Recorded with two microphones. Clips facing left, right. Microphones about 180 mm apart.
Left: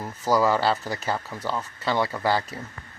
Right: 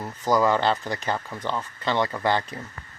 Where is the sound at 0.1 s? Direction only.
10° left (ahead or behind).